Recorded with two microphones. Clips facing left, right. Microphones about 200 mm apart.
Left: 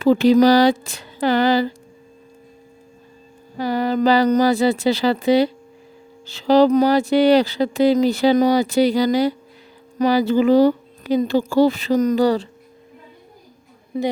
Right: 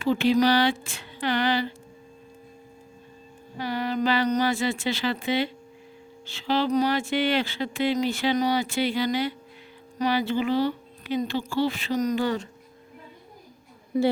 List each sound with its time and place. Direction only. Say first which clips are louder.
0.0 s music: left 8 dB; 40° left (ahead or behind)
3.6 s music: left 8 dB; 40° left (ahead or behind)